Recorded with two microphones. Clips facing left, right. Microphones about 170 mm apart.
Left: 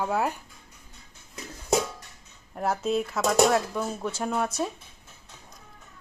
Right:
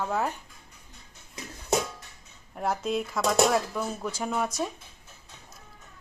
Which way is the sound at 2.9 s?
5° left (ahead or behind).